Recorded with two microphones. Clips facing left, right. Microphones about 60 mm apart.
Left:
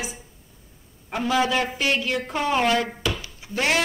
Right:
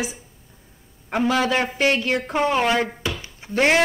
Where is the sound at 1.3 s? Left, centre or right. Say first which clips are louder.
Right 1 dB; right.